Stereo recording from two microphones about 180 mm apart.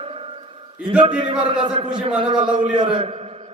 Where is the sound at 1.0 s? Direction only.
30° right (ahead or behind).